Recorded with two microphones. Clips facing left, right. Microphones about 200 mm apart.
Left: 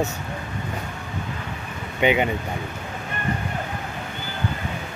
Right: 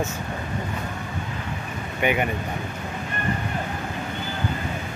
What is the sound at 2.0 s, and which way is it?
Speech, 20° left (ahead or behind).